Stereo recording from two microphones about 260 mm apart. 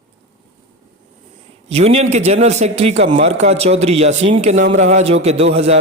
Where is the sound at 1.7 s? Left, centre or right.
Right.